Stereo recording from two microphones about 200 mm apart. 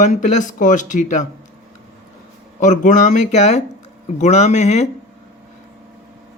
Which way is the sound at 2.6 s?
40° left (ahead or behind).